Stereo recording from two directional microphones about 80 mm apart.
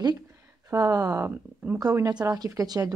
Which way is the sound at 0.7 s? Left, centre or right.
Right.